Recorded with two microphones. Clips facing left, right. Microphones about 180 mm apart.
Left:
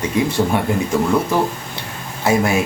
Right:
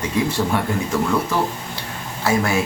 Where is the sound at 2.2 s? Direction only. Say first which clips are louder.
Left 3 dB; 20° left (ahead or behind).